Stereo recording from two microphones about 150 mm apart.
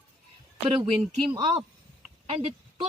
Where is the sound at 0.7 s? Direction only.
40° right (ahead or behind).